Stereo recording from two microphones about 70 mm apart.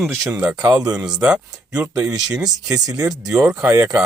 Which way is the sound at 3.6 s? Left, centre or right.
Right.